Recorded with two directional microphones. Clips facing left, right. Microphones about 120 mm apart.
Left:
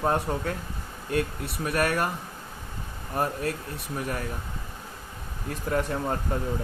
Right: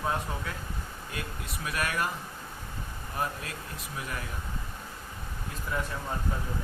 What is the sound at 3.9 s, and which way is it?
Speech, 45° left (ahead or behind).